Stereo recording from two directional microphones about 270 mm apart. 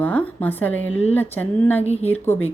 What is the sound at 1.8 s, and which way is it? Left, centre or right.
Speech, left.